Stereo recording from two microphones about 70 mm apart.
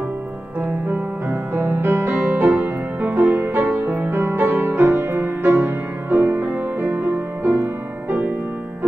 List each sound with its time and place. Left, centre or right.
0.8 s music: right